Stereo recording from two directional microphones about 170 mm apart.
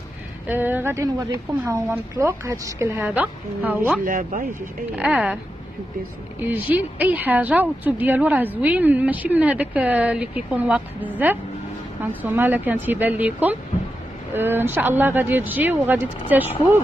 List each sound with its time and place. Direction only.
0.5 s a woman's voice: 10° right (ahead or behind)
4.0 s speech: 50° right (ahead or behind)
4.9 s a woman's voice: 5° right (ahead or behind)
6.4 s a woman's voice: 10° right (ahead or behind)
12.2 s a woman's voice: 10° right (ahead or behind)